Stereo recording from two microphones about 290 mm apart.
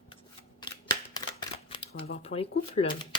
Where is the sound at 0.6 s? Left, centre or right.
Centre.